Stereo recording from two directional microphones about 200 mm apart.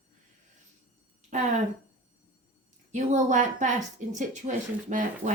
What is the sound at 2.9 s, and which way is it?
A woman's voice, 35° right (ahead or behind).